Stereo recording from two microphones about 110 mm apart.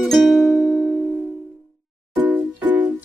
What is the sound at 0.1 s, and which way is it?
Music, centre (ahead or behind).